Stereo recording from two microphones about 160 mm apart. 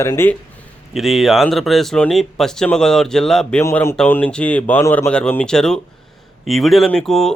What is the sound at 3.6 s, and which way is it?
Speech, 15° left (ahead or behind).